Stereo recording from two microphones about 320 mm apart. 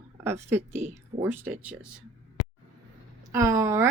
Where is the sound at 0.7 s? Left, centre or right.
Right.